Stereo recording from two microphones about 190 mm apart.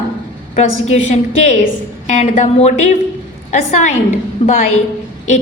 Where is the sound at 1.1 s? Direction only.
35° left (ahead or behind).